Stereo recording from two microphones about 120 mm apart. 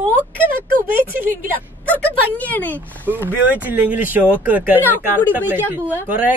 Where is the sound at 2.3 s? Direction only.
15° left (ahead or behind).